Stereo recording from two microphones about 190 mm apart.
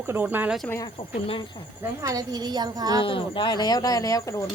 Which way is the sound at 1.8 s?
15° right (ahead or behind).